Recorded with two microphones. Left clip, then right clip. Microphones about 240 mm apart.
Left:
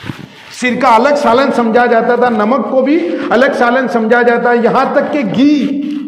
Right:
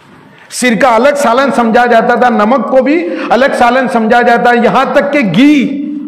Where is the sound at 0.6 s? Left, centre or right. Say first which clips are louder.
Right 1 dB; right.